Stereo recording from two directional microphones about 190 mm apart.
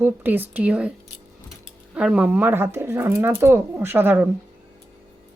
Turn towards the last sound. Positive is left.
turn(degrees=-10)  # may be behind; listen again after turning